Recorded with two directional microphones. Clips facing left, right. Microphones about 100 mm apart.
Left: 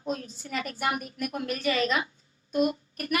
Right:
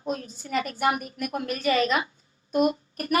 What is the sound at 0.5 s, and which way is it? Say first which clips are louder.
A woman's voice: right 5 dB; 50° right (ahead or behind).